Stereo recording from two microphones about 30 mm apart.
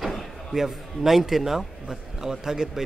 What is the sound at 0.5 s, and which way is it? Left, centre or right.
A man's voice, centre.